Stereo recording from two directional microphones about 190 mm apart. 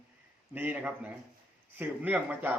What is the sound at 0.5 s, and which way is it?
A man's voice, 10° right (ahead or behind).